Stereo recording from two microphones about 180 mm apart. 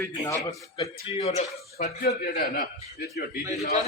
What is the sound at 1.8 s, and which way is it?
Speech, 60° left (ahead or behind).